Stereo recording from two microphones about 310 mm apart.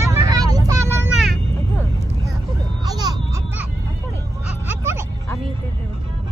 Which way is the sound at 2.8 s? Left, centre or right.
Centre.